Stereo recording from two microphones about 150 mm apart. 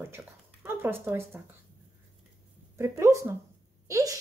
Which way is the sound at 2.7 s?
20° right (ahead or behind).